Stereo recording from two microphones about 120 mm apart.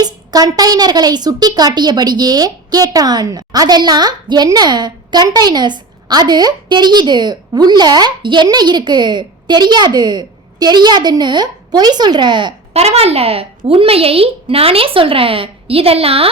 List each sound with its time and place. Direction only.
0.0 s a woman's voice: 35° right (ahead or behind)
12.7 s a woman's voice: 60° right (ahead or behind)